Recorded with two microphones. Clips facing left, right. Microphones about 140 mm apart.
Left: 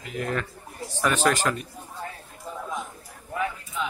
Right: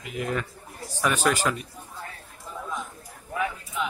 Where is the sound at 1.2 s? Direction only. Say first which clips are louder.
Left 1 dB; 10° right (ahead or behind).